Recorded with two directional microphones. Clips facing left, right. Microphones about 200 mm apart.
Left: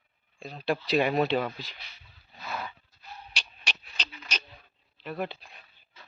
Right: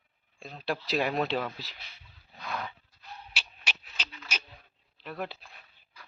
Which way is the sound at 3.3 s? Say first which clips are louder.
Left 1 dB; 5° right (ahead or behind).